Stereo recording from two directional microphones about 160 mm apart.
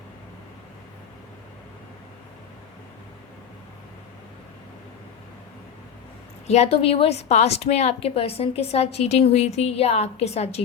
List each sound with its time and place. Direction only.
6.5 s a woman's voice: 40° left (ahead or behind)